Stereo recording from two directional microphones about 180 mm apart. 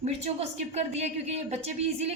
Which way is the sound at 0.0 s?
35° right (ahead or behind).